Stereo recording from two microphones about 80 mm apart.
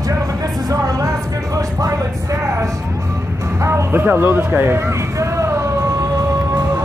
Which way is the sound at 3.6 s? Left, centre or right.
Right.